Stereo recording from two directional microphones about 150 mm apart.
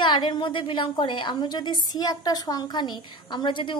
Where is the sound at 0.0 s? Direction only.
30° left (ahead or behind).